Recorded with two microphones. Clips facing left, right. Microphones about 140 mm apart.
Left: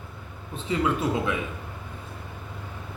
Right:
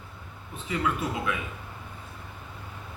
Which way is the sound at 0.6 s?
25° left (ahead or behind).